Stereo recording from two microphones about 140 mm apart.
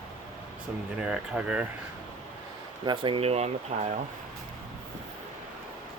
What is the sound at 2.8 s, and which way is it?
Speech, 35° right (ahead or behind).